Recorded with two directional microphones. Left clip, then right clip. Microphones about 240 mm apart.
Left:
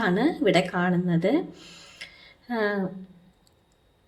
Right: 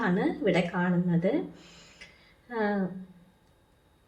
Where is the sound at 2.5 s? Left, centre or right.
Left.